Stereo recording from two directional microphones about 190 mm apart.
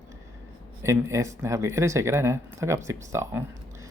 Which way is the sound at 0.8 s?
15° right (ahead or behind).